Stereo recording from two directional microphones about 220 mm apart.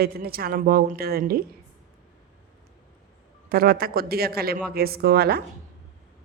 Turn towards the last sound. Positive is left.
turn(degrees=-45)  # may be behind; listen again after turning